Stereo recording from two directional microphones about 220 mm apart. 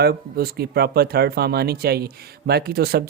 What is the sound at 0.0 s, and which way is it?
Speech, 45° right (ahead or behind).